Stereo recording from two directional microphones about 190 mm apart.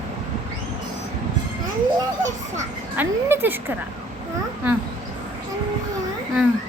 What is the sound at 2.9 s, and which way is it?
Speech, 10° right (ahead or behind).